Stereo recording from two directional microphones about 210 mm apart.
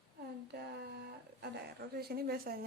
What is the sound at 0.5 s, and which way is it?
A woman's voice, 50° right (ahead or behind).